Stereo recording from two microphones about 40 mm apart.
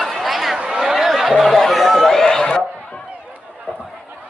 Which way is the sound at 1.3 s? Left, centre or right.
Centre.